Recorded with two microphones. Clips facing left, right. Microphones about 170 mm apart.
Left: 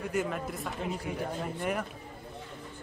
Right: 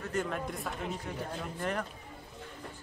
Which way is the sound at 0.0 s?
10° left (ahead or behind).